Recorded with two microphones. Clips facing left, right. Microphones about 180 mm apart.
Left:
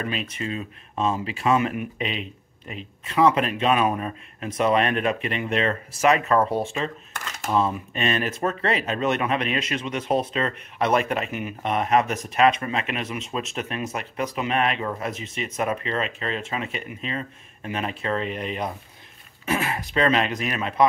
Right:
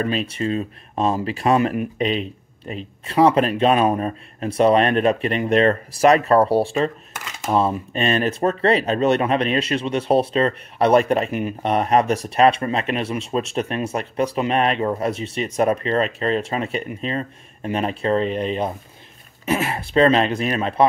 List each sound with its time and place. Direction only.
0.0 s speech: 35° right (ahead or behind)
19.7 s speech: 30° right (ahead or behind)